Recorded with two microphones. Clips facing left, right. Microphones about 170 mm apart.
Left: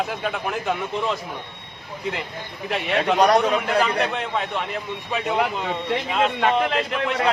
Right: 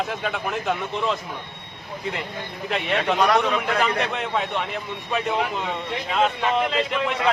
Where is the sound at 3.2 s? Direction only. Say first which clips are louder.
Left 4 dB; 40° left (ahead or behind).